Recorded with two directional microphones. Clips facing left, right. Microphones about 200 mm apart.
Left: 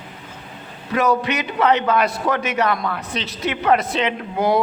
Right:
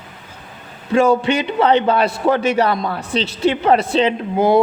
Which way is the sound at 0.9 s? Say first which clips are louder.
Right 5 dB; 30° right (ahead or behind).